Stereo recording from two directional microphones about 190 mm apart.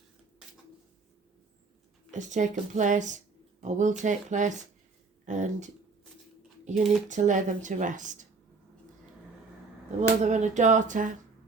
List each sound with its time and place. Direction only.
2.1 s speech: 40° right (ahead or behind)
6.7 s speech: 40° right (ahead or behind)
10.0 s speech: 40° right (ahead or behind)